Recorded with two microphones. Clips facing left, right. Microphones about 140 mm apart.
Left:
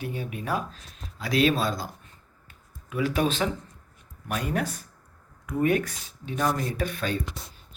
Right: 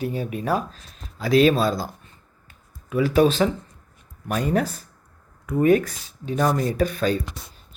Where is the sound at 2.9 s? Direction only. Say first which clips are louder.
Right 7 dB; 35° right (ahead or behind).